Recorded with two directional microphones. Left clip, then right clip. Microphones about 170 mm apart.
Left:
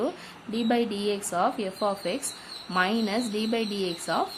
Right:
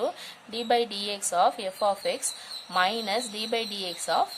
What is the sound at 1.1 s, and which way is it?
Speech, 35° right (ahead or behind).